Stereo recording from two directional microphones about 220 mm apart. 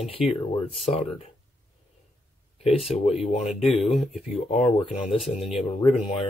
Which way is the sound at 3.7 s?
Centre (ahead or behind).